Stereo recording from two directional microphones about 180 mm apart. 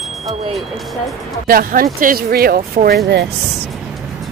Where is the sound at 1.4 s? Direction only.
50° right (ahead or behind).